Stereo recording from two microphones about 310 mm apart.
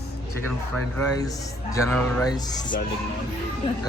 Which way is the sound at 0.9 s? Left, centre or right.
Centre.